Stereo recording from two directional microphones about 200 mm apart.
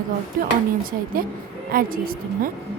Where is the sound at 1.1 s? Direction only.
45° right (ahead or behind).